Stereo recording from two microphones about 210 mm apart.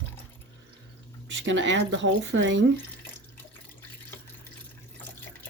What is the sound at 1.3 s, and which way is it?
Speech, 60° right (ahead or behind).